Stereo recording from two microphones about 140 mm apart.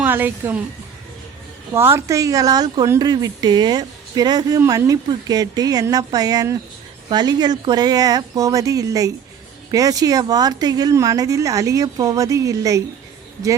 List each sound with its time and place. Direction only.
0.0 s a woman's voice: 15° right (ahead or behind)
1.7 s speech: 20° right (ahead or behind)